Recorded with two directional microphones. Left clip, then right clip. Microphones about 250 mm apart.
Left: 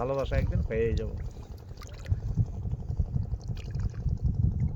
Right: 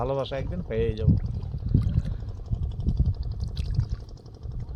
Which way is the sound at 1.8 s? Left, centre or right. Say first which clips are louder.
Right 13 dB; left.